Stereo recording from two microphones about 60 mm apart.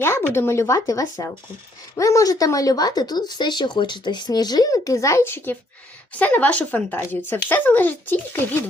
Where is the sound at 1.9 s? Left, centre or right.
Left.